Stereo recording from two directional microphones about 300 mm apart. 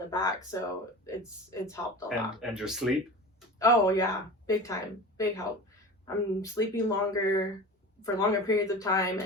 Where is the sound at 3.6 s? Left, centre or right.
Centre.